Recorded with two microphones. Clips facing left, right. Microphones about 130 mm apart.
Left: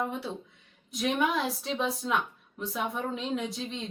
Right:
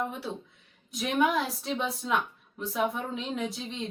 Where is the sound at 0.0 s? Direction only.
Centre (ahead or behind).